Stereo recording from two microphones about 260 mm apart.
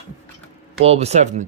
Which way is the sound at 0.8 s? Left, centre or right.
Right.